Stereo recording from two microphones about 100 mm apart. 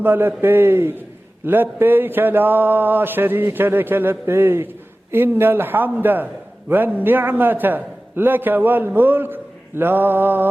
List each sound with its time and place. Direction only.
0.0 s a man's voice: 20° right (ahead or behind)